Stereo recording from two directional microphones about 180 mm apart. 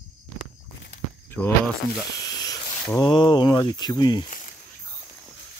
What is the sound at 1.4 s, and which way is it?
Speech, 5° left (ahead or behind).